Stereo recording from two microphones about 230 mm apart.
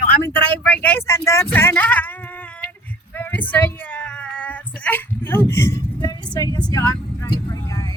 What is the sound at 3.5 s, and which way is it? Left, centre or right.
Speech, centre.